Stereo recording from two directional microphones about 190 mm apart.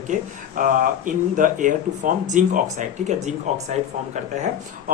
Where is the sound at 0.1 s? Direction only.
45° right (ahead or behind).